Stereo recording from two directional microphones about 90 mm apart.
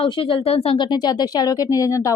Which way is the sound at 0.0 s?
65° left (ahead or behind).